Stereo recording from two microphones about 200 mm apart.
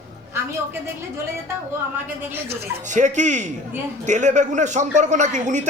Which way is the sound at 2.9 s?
35° right (ahead or behind).